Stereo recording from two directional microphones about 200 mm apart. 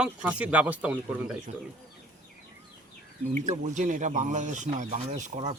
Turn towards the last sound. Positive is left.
turn(degrees=-35)  # may be behind; listen again after turning